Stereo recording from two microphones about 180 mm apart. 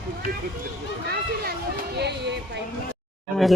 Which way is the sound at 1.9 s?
65° right (ahead or behind).